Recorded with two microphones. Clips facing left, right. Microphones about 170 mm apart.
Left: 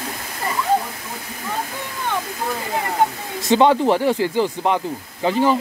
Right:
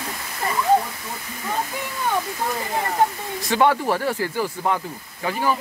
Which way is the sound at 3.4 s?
25° left (ahead or behind).